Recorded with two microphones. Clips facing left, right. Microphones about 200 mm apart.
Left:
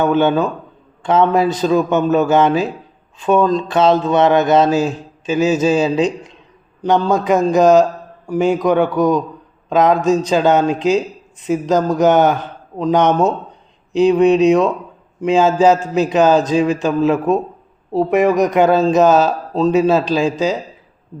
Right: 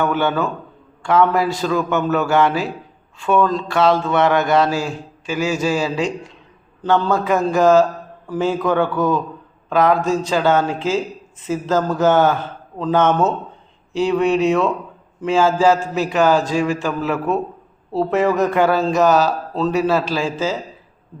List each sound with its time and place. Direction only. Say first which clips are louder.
0.0 s a man's voice: left 5 dB; 20° left (ahead or behind)